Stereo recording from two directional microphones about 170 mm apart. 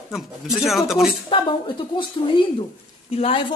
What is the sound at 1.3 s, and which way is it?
A woman's voice, 30° left (ahead or behind).